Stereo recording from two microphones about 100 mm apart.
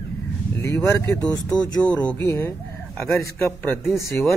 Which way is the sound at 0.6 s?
25° left (ahead or behind).